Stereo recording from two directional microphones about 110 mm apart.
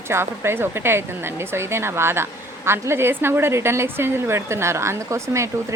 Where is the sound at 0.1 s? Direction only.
20° right (ahead or behind).